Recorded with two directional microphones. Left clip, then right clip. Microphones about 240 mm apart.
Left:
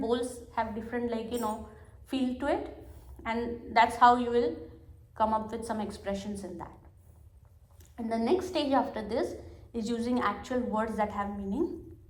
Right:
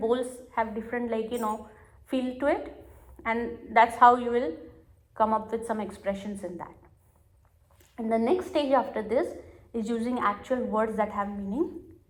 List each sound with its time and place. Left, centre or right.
0.0 s a woman's voice: right
7.9 s a woman's voice: right